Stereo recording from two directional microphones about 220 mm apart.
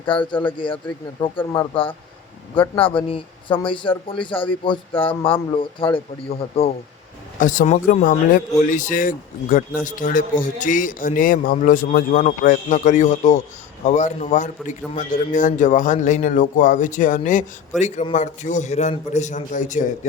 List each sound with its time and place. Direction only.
0.1 s a man's voice: 20° left (ahead or behind)
7.3 s speech: 35° left (ahead or behind)